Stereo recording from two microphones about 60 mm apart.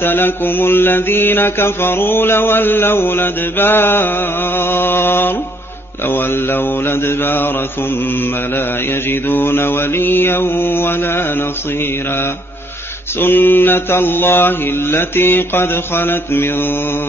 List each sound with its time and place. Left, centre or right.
0.0 s mantra: left
9.1 s mantra: left
13.2 s mantra: left